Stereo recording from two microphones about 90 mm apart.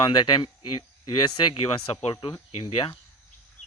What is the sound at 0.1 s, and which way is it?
Speech, 55° left (ahead or behind).